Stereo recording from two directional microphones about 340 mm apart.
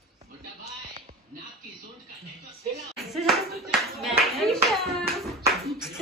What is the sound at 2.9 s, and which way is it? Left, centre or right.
Clapping, centre.